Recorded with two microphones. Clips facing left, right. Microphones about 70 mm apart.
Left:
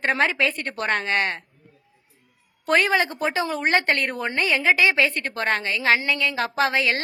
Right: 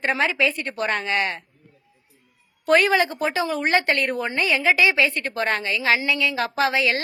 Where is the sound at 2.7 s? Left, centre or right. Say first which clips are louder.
Right 2 dB; left.